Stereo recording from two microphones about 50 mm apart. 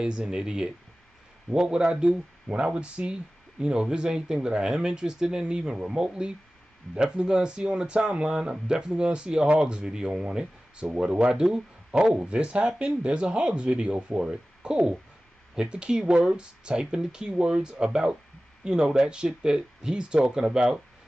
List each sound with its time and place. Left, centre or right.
0.0 s speech: centre